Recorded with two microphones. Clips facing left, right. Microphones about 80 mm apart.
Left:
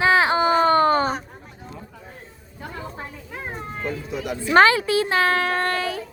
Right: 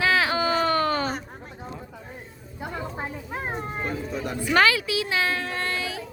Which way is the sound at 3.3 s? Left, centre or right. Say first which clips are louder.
Even; right.